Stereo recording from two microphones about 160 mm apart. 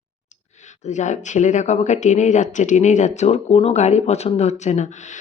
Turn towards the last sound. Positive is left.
turn(degrees=45)  # may be behind; listen again after turning